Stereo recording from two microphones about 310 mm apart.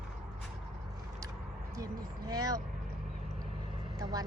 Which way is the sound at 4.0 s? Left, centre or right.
Centre.